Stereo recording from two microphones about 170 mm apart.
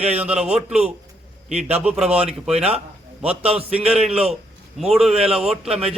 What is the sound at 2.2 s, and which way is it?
Speech, 35° right (ahead or behind).